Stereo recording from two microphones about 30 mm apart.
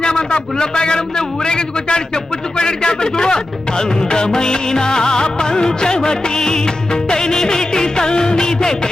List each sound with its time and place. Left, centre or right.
0.0 s a man's voice: left